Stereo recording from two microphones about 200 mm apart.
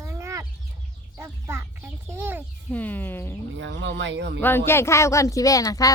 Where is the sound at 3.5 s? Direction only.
65° right (ahead or behind).